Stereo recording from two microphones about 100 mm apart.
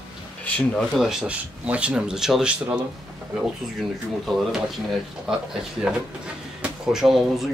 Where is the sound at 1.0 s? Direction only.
5° right (ahead or behind).